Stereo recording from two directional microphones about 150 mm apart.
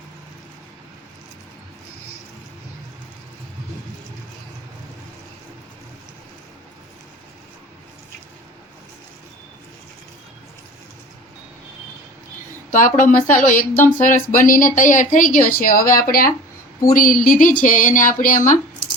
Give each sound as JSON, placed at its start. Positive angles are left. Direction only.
{"t": 12.7, "sound": "speech", "side_deg": 60}